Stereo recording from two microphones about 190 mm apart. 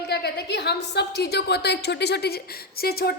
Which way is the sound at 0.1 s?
60° left (ahead or behind).